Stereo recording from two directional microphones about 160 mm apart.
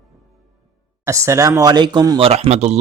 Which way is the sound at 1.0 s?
20° right (ahead or behind).